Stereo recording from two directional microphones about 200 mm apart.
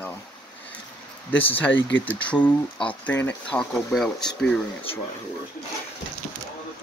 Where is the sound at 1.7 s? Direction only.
65° left (ahead or behind).